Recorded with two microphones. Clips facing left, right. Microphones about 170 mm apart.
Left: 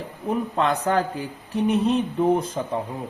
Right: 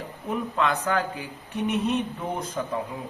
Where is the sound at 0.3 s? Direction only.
35° left (ahead or behind).